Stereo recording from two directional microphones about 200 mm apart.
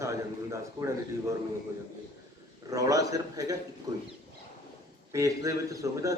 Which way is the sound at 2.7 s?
15° right (ahead or behind).